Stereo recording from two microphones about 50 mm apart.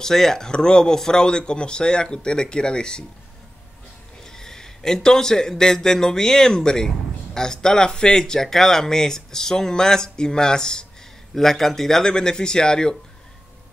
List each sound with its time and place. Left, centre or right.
0.0 s speech: centre
4.2 s a man's voice: centre